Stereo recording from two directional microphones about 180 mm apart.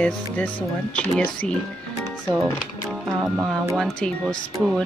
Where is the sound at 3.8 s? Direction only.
5° left (ahead or behind).